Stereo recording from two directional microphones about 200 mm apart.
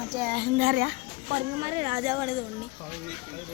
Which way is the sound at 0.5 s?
60° right (ahead or behind).